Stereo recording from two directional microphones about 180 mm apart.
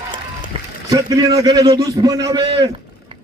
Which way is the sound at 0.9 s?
20° right (ahead or behind).